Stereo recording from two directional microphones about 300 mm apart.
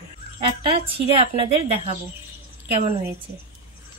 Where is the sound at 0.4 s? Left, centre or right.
Centre.